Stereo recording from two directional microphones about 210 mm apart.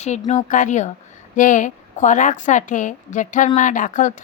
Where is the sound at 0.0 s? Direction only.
35° left (ahead or behind).